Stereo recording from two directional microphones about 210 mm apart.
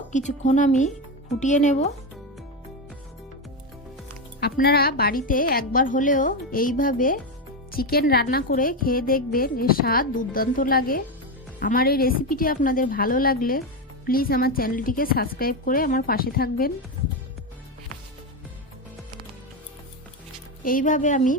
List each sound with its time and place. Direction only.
0.1 s a woman's voice: 35° left (ahead or behind)
4.4 s a woman's voice: 50° left (ahead or behind)
20.7 s a woman's voice: 40° left (ahead or behind)